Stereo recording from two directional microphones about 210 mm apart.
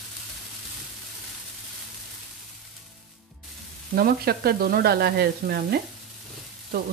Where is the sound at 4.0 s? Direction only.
45° right (ahead or behind).